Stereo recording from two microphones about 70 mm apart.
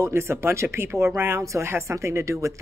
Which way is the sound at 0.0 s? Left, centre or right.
Right.